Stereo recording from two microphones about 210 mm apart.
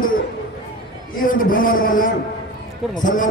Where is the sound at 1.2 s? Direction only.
40° left (ahead or behind).